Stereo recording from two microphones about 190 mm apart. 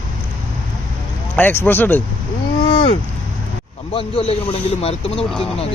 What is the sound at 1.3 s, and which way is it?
Speech, 10° left (ahead or behind).